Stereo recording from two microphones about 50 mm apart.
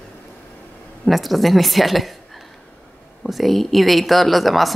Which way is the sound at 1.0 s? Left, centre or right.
Centre.